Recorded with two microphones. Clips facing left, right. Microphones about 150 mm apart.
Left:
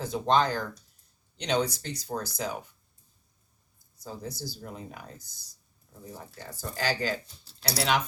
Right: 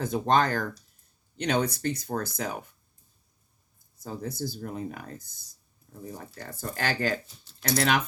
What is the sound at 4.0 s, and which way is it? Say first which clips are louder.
Speech: right 4 dB; 55° right (ahead or behind).